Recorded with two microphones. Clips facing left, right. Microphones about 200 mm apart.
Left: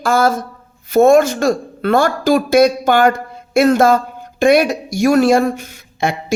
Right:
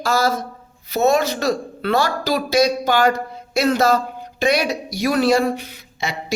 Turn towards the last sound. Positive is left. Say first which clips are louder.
# left 8 dB
turn(degrees=50)  # may be behind; listen again after turning